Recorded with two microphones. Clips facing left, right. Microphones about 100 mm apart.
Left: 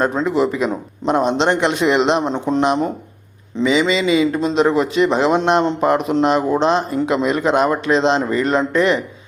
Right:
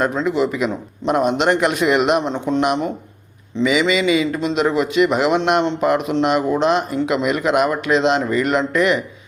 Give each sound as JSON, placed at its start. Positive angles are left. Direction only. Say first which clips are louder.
{"t": 0.0, "sound": "a man's voice", "louder": "left 1 dB", "side_deg": 35}